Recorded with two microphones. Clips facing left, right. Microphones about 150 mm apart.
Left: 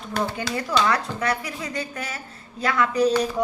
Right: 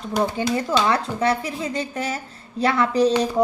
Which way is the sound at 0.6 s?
25° right (ahead or behind).